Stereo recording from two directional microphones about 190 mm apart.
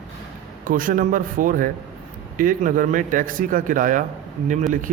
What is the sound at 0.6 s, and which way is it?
A man's voice, 45° right (ahead or behind).